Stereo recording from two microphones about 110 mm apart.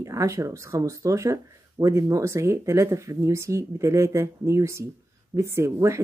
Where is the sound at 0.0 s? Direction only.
30° right (ahead or behind).